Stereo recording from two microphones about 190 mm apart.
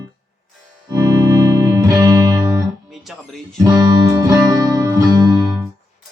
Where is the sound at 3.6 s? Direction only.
20° right (ahead or behind).